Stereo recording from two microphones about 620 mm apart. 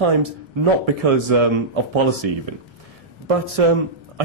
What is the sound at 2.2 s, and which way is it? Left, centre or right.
Speech, right.